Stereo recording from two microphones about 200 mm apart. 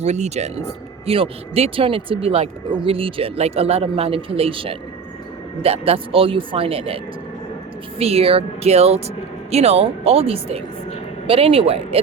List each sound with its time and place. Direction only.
0.0 s speech: 35° right (ahead or behind)